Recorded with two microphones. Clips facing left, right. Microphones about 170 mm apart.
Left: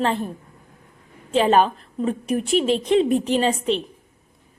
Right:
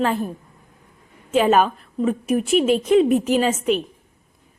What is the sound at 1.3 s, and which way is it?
Speech, 30° left (ahead or behind).